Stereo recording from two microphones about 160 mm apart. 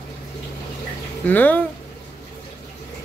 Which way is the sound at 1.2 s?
10° left (ahead or behind).